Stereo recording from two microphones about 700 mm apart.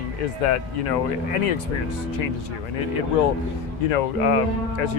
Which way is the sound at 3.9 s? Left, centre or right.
Left.